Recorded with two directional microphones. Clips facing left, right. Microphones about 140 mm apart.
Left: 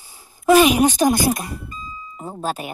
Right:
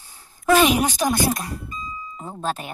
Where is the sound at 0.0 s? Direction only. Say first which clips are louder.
Left 4 dB; 10° left (ahead or behind).